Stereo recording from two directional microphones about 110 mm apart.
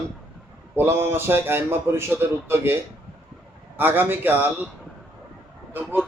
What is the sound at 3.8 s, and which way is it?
Speech, 20° right (ahead or behind).